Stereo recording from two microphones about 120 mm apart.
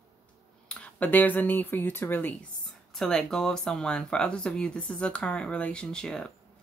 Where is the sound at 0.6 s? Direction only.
10° left (ahead or behind).